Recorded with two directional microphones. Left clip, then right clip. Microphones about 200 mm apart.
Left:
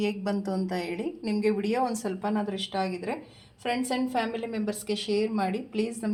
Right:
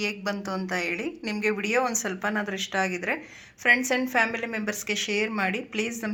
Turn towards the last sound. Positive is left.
turn(degrees=0)  # may be behind; listen again after turning